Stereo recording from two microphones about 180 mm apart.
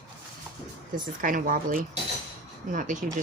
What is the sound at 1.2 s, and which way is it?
A woman's voice, 50° right (ahead or behind).